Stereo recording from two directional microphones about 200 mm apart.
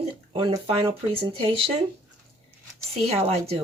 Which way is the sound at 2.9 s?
30° right (ahead or behind).